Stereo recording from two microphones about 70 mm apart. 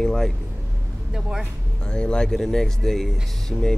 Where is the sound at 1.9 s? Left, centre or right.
Centre.